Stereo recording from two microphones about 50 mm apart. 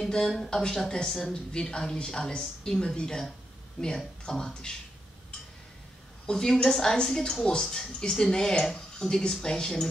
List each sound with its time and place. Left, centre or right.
0.0 s a woman's voice: centre
6.2 s a woman's voice: centre